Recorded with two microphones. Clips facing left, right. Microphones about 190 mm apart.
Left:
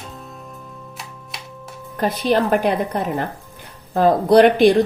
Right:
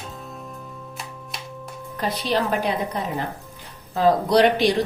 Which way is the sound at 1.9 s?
50° left (ahead or behind).